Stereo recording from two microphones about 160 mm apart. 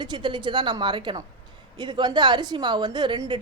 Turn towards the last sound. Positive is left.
turn(degrees=-30)  # may be behind; listen again after turning